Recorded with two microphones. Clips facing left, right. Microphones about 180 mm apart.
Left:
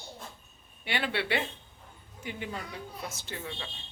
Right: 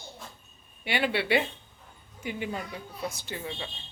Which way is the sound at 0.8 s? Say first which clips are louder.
Right 4 dB; 15° right (ahead or behind).